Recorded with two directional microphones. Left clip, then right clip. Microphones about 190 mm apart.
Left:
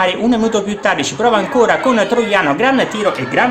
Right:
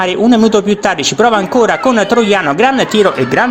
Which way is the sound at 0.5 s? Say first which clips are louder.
Right 4 dB; 35° right (ahead or behind).